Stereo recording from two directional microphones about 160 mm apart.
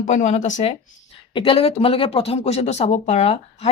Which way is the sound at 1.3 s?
30° left (ahead or behind).